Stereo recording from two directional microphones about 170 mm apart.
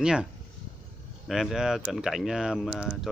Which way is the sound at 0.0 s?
5° right (ahead or behind).